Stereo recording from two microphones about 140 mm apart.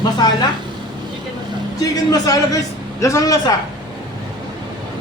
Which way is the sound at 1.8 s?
25° left (ahead or behind).